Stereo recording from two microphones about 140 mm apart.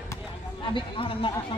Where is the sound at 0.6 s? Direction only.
35° left (ahead or behind).